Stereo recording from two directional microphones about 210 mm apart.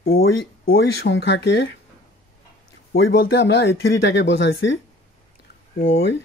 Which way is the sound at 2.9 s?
50° left (ahead or behind).